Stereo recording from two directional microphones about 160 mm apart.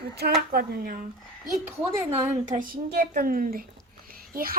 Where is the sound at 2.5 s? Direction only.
60° right (ahead or behind).